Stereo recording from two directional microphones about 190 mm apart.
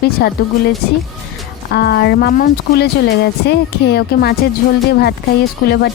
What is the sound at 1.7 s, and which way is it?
Speech, 55° left (ahead or behind).